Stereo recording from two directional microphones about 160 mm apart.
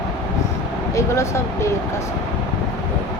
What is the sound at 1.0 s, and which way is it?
Speech, 15° left (ahead or behind).